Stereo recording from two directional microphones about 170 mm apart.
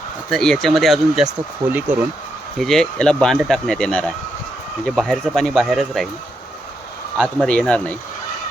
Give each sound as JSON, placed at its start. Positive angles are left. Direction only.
{"t": 0.3, "sound": "speech", "side_deg": 5}
{"t": 1.6, "sound": "speech", "side_deg": -25}
{"t": 2.6, "sound": "speech", "side_deg": 0}
{"t": 7.2, "sound": "speech", "side_deg": 5}